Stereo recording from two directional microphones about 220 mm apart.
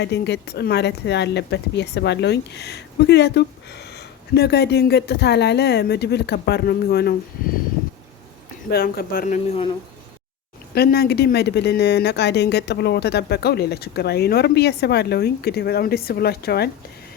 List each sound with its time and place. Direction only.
0.0 s speech: 50° left (ahead or behind)
8.7 s speech: 45° left (ahead or behind); by 9.7 s 30° left (ahead or behind)
10.8 s speech: 45° left (ahead or behind)